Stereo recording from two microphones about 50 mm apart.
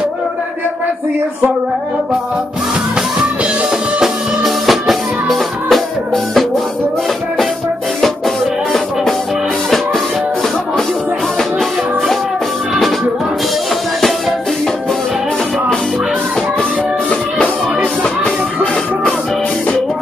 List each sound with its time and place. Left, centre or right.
4.0 s music: centre
18.2 s music: left